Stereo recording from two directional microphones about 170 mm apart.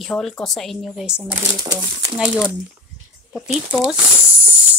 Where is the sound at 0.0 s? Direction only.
Centre (ahead or behind).